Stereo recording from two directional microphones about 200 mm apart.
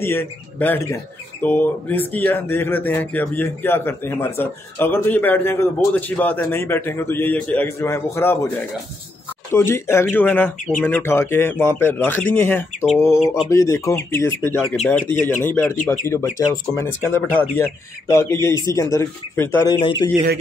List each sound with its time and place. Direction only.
0.0 s speech: 10° left (ahead or behind)
9.5 s speech: 10° left (ahead or behind)